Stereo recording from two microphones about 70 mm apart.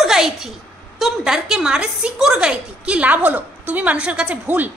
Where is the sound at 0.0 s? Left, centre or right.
Centre.